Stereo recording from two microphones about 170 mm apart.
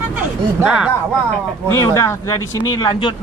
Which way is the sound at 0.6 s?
5° right (ahead or behind).